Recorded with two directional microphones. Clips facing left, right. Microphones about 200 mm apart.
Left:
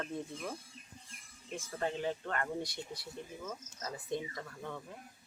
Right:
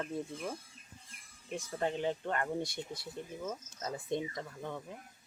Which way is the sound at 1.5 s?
20° right (ahead or behind).